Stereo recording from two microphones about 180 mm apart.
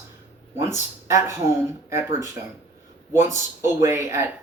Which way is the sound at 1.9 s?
15° right (ahead or behind).